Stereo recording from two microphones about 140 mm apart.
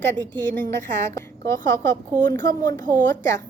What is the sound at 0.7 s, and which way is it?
A woman's voice, 15° left (ahead or behind).